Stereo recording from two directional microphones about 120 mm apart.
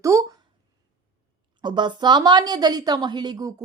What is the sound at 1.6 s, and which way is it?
A woman's voice, 40° right (ahead or behind).